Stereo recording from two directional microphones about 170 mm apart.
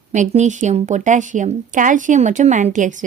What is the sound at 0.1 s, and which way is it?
A woman's voice, 45° right (ahead or behind).